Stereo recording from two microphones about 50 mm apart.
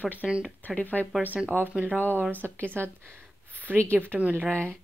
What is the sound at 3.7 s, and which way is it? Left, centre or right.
Speech, left.